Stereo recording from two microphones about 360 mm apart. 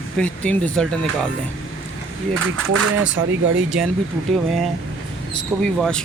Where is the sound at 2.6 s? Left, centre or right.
Right.